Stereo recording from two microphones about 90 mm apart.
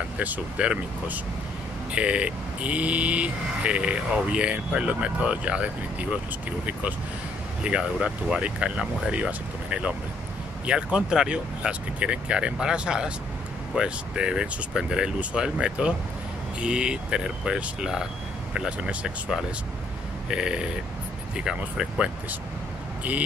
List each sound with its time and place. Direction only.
0.2 s speech: 15° right (ahead or behind)
7.6 s speech: 10° right (ahead or behind)